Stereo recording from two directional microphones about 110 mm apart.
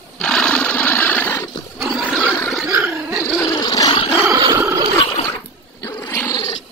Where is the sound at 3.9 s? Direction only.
60° left (ahead or behind).